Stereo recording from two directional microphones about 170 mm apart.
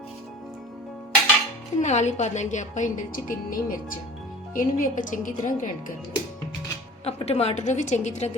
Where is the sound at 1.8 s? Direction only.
45° left (ahead or behind).